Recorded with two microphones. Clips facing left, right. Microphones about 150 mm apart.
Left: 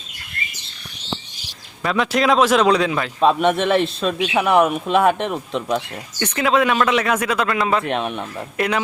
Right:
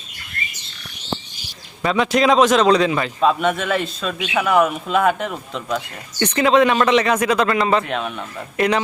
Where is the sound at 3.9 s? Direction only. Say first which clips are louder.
Left 3 dB; 30° left (ahead or behind).